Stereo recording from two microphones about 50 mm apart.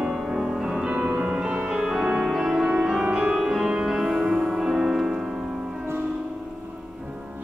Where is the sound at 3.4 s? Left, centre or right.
Centre.